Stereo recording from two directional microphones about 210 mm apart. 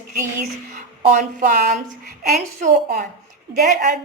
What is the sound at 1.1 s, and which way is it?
A woman's voice, 40° right (ahead or behind).